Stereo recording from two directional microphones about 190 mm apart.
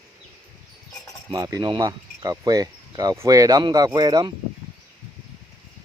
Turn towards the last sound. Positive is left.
turn(degrees=-20)  # may be behind; listen again after turning